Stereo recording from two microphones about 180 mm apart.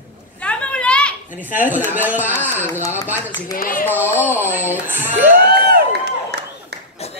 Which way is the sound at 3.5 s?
50° left (ahead or behind).